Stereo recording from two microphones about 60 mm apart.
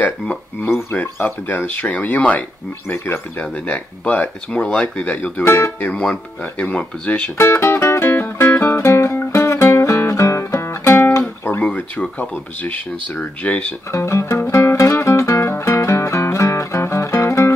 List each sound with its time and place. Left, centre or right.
0.9 s speech: left
5.4 s speech: left
5.8 s speech: left
7.3 s music: left
11.1 s guitar: left
11.6 s speech: left
13.9 s music: left